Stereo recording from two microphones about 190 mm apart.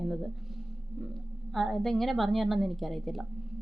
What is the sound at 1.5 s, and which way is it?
A woman's voice, centre (ahead or behind).